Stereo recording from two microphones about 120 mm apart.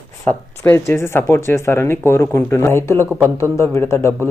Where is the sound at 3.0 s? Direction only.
20° right (ahead or behind).